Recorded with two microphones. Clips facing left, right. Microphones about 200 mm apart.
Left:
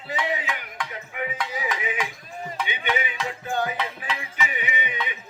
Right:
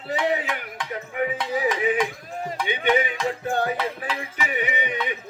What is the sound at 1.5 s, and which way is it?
Music, 40° right (ahead or behind).